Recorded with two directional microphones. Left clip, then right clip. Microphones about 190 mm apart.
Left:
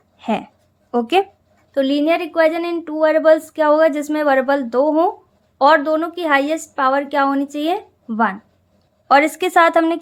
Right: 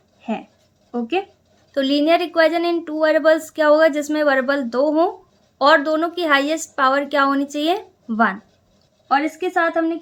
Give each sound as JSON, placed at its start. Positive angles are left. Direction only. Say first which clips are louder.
{"t": 0.2, "sound": "speech", "louder": "left 6 dB", "side_deg": 45}
{"t": 1.7, "sound": "a woman's voice", "louder": "even", "side_deg": 15}
{"t": 9.0, "sound": "a woman's voice", "louder": "left 6 dB", "side_deg": 50}